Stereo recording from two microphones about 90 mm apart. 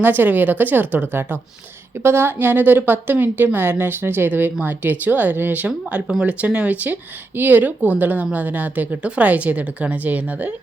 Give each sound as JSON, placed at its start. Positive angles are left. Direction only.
{"t": 0.0, "sound": "a woman's voice", "side_deg": -20}